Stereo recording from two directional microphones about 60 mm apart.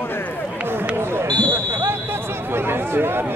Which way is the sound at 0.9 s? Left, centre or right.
Right.